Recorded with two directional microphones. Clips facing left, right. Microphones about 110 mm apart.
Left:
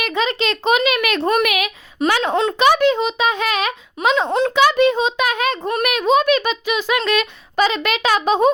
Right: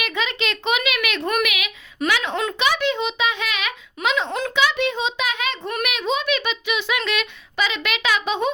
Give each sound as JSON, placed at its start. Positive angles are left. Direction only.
{"t": 0.0, "sound": "a child's voice", "side_deg": 35}
{"t": 4.3, "sound": "a child's voice", "side_deg": 25}
{"t": 4.5, "sound": "a child's voice", "side_deg": 45}